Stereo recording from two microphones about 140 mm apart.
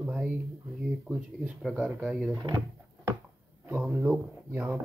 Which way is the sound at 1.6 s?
Centre (ahead or behind).